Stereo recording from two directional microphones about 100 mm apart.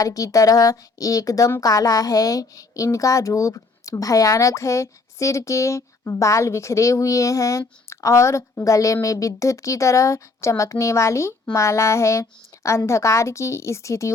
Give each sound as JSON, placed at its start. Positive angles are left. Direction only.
{"t": 0.0, "sound": "a woman's voice", "side_deg": 35}